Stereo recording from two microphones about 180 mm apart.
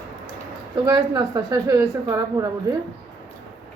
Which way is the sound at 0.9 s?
20° right (ahead or behind).